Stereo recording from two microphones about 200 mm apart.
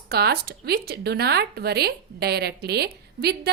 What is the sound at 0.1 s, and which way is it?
Speech, 50° right (ahead or behind).